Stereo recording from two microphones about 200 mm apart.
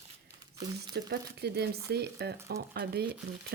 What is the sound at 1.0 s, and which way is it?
A woman's voice, 55° right (ahead or behind).